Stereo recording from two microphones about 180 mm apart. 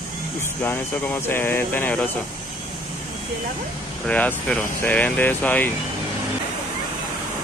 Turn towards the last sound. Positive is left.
turn(degrees=10)  # may be behind; listen again after turning